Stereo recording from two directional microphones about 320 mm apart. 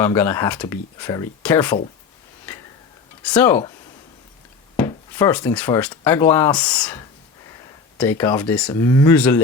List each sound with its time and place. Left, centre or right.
0.0 s speech: centre
3.2 s speech: centre
4.8 s speech: centre
7.5 s a sound: centre
8.2 s speech: centre